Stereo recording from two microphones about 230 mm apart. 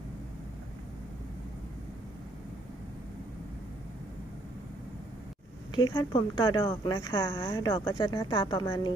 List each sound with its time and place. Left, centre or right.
5.7 s a woman's voice: centre